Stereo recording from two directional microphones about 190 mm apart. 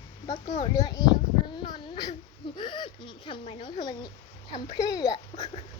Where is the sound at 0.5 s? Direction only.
20° left (ahead or behind).